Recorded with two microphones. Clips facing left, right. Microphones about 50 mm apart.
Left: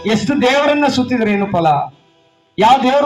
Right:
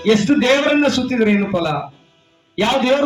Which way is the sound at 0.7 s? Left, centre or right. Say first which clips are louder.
Left 2 dB; centre.